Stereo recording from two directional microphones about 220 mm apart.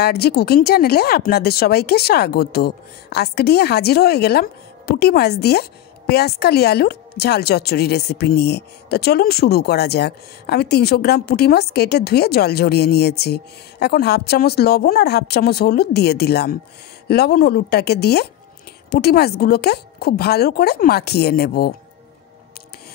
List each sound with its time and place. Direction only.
0.0 s speech: 45° left (ahead or behind)